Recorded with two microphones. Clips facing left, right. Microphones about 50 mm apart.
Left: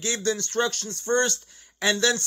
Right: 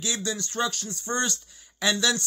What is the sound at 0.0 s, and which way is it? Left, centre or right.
A man's voice, left.